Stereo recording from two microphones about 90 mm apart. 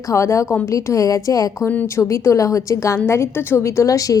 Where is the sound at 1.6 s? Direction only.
20° left (ahead or behind).